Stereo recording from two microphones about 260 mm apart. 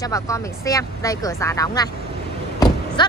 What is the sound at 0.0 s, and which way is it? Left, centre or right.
A woman's voice, centre.